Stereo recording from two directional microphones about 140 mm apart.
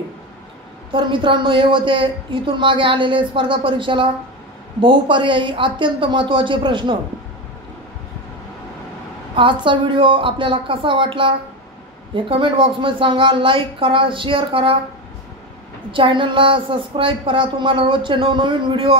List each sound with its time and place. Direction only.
0.9 s a woman's voice: 35° right (ahead or behind)
9.3 s a woman's voice: 35° right (ahead or behind)
15.9 s a woman's voice: 35° right (ahead or behind)